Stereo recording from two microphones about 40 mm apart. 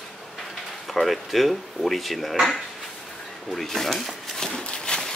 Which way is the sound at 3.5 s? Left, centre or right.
Centre.